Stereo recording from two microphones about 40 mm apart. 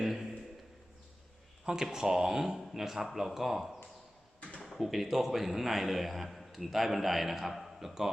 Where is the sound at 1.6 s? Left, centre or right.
Centre.